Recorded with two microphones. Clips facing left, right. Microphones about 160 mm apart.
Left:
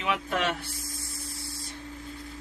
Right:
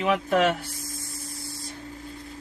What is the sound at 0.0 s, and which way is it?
Speech, 40° right (ahead or behind).